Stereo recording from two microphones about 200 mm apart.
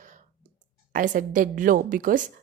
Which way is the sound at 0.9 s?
40° right (ahead or behind).